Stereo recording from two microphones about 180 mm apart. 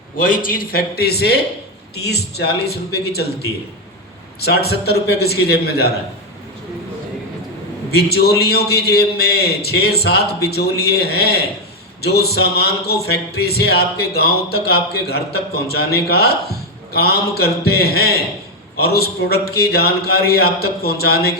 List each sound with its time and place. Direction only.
0.2 s speech: 50° left (ahead or behind)
7.9 s speech: 60° left (ahead or behind)